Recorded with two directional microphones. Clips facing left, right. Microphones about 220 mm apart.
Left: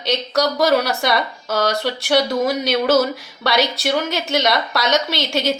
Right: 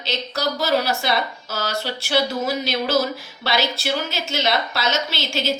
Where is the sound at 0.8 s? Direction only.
60° left (ahead or behind).